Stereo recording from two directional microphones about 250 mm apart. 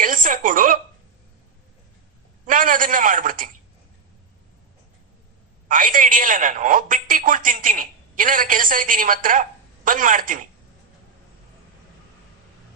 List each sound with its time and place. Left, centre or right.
0.0 s a woman's voice: right
2.5 s speech: right
5.6 s speech: right